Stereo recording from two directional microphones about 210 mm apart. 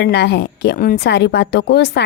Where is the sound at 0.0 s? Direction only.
50° left (ahead or behind).